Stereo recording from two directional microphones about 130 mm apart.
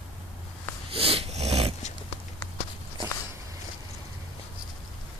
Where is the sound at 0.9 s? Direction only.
45° right (ahead or behind).